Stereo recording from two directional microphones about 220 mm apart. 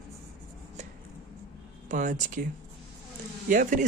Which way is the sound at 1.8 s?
35° right (ahead or behind).